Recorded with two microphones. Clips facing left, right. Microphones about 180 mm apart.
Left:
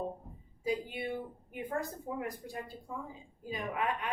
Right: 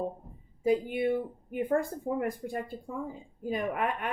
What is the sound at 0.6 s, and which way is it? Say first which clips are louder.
Speech: right 8 dB; 55° right (ahead or behind).